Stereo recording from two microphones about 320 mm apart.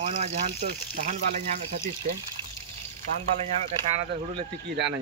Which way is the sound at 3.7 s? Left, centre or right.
Centre.